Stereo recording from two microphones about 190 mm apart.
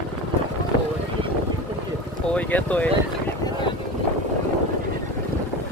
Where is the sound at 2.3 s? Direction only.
5° left (ahead or behind).